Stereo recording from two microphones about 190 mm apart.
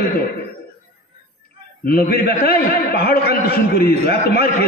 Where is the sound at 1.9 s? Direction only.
55° left (ahead or behind).